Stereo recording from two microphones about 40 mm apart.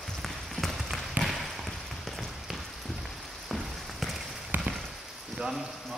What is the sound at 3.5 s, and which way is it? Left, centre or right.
Rain on surface, centre.